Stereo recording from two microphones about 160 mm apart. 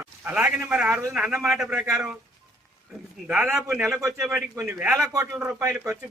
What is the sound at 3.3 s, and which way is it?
Speech, 10° right (ahead or behind).